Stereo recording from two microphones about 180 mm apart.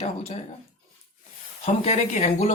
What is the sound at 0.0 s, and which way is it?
Speech, 35° left (ahead or behind).